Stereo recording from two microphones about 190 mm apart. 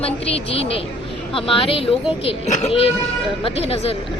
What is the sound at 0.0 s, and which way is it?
A woman's voice, 30° left (ahead or behind).